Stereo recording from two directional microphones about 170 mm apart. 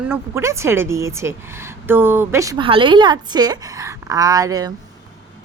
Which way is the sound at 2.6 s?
30° right (ahead or behind).